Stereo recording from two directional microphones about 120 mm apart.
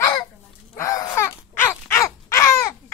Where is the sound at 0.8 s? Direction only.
25° left (ahead or behind).